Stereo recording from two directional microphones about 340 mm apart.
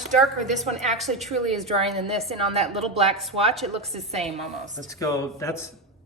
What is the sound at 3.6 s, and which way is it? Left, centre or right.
Speech, centre.